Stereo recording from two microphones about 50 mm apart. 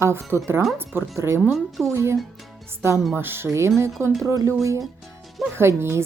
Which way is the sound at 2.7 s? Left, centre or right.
Right.